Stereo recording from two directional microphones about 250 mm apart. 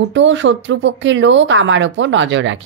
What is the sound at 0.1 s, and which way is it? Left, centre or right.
Speech, right.